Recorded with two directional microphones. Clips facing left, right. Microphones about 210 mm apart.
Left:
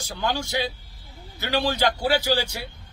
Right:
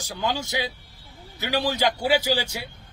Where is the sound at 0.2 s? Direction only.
20° right (ahead or behind).